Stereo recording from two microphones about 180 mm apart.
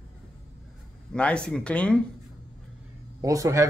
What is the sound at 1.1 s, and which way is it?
Speech, 5° left (ahead or behind).